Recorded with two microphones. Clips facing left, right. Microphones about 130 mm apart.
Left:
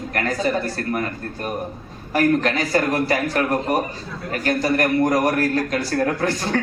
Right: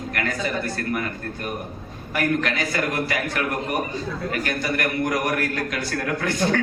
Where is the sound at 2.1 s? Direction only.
35° left (ahead or behind).